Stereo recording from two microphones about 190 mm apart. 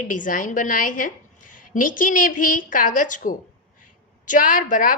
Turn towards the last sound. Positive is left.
turn(degrees=45)  # may be behind; listen again after turning